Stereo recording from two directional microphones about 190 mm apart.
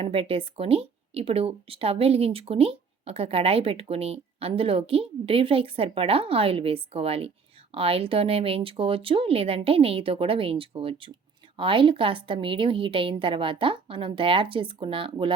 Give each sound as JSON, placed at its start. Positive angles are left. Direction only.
{"t": 0.0, "sound": "speech", "side_deg": -30}